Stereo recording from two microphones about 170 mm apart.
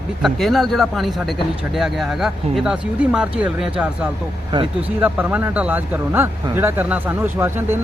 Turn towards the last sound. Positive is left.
turn(degrees=-15)  # may be behind; listen again after turning